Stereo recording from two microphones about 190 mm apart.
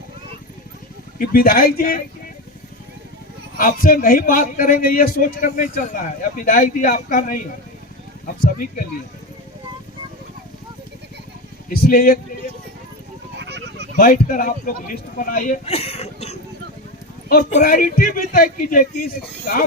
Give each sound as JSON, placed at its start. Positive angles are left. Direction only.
{"t": 1.3, "sound": "speech", "side_deg": 50}
{"t": 3.6, "sound": "speech", "side_deg": 45}
{"t": 8.4, "sound": "speech", "side_deg": 45}
{"t": 11.7, "sound": "speech", "side_deg": 50}
{"t": 13.3, "sound": "a sound", "side_deg": -65}
{"t": 13.9, "sound": "speech", "side_deg": 45}
{"t": 17.6, "sound": "speech", "side_deg": 45}